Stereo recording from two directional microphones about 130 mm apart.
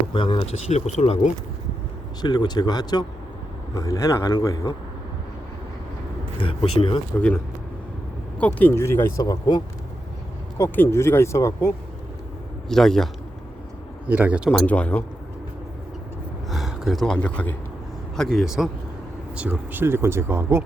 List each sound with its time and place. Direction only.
0.1 s speech: 40° left (ahead or behind)
0.7 s speech: 60° left (ahead or behind)
2.2 s speech: 35° left (ahead or behind)
6.4 s speech: 45° left (ahead or behind)
8.4 s speech: 10° left (ahead or behind); by 9.6 s 30° left (ahead or behind)
10.8 s speech: 20° left (ahead or behind)
12.6 s a man's voice: 5° left (ahead or behind)
14.1 s speech: 10° right (ahead or behind)
14.7 s speech: 10° left (ahead or behind)
16.5 s a man's voice: centre (ahead or behind)
19.4 s speech: 15° right (ahead or behind)